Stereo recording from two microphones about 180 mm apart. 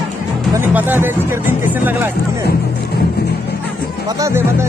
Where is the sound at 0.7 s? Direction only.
10° right (ahead or behind).